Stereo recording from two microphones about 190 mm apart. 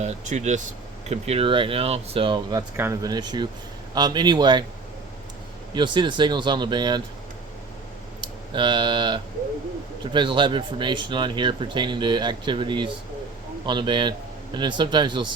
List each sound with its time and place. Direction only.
0.0 s speech: 35° right (ahead or behind)
5.7 s speech: 25° right (ahead or behind)
8.2 s speech: 25° right (ahead or behind)